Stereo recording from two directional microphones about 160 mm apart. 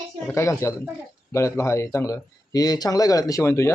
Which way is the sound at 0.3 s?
15° left (ahead or behind).